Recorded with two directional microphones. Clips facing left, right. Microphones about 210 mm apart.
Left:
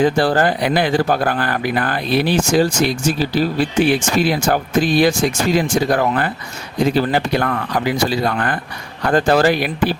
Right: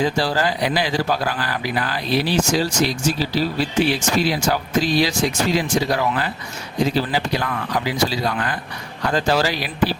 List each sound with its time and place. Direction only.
0.0 s speech: 55° left (ahead or behind)